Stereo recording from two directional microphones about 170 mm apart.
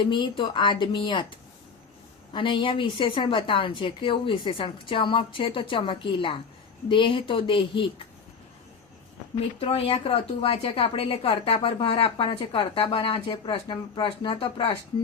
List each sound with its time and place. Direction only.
0.0 s a woman's voice: 30° left (ahead or behind)
9.6 s a woman's voice: 35° left (ahead or behind)